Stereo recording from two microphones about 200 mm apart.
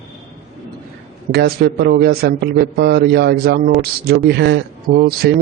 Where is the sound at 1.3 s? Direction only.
55° right (ahead or behind).